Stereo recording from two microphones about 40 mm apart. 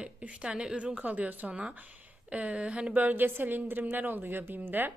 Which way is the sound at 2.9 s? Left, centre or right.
Right.